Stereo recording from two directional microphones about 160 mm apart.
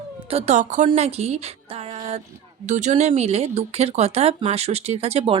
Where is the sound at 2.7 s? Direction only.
45° right (ahead or behind).